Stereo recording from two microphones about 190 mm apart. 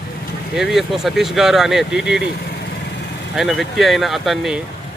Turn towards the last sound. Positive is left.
turn(degrees=0)  # may be behind; listen again after turning